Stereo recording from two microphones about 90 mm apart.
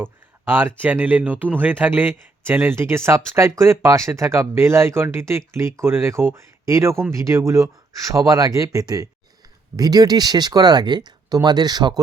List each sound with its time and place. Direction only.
0.0 s speech: 25° right (ahead or behind); by 11.9 s 50° right (ahead or behind)